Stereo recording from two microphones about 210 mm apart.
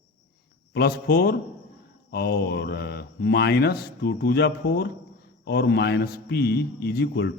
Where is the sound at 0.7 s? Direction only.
45° left (ahead or behind).